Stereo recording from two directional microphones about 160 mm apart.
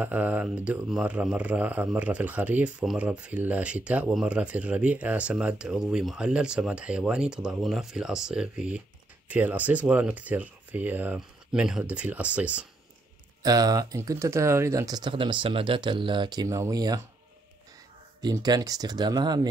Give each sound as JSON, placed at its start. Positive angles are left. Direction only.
{"t": 0.0, "sound": "speech", "side_deg": -10}
{"t": 13.4, "sound": "speech", "side_deg": -25}
{"t": 18.2, "sound": "speech", "side_deg": -25}